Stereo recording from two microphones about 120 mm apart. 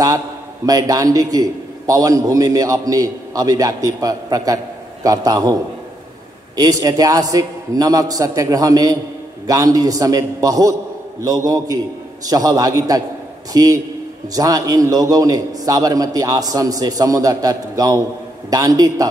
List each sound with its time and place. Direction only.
0.7 s a man's voice: 30° right (ahead or behind)